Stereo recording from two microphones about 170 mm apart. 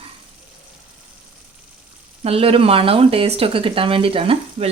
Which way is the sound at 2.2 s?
35° right (ahead or behind).